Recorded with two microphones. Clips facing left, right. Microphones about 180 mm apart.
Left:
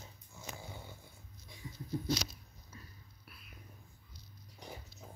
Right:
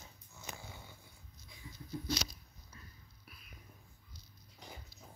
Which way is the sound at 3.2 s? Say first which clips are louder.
Even; centre (ahead or behind).